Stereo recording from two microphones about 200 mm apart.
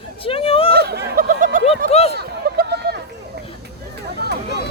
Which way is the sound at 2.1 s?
55° right (ahead or behind).